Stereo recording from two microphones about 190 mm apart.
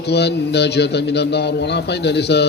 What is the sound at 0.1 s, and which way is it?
A man's voice, 60° left (ahead or behind).